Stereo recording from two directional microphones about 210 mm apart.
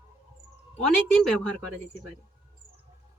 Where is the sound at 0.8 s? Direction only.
5° left (ahead or behind).